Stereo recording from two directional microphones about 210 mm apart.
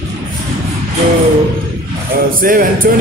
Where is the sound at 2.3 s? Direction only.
40° right (ahead or behind).